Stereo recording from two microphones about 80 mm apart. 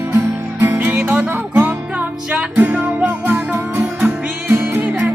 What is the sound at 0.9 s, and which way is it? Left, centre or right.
Music, centre.